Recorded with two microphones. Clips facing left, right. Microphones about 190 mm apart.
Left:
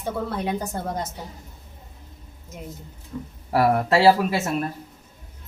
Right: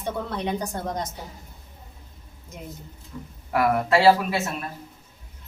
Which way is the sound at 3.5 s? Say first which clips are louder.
Left 2 dB; 35° left (ahead or behind).